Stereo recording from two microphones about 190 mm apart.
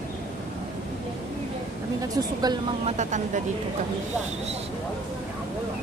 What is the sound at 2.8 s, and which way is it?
Speech, 40° right (ahead or behind).